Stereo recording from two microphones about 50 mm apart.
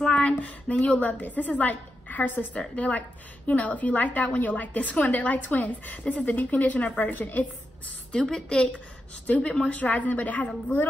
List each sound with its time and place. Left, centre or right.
0.0 s a woman's voice: left
8.1 s a woman's voice: centre
9.2 s a woman's voice: left